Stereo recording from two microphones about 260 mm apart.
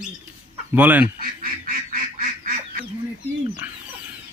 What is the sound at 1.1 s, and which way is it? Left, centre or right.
Goose, right.